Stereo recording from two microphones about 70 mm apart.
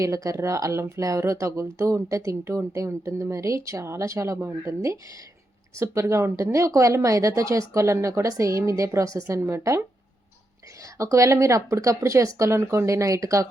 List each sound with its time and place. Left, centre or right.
0.0 s speech: right
10.9 s speech: right